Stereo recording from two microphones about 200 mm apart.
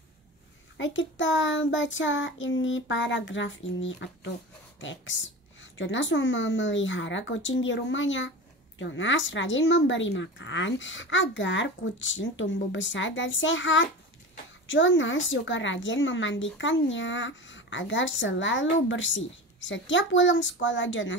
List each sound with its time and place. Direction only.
0.7 s speech: 70° left (ahead or behind)